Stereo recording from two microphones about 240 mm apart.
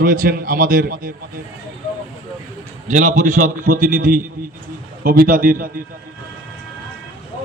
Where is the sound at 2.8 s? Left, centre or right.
Right.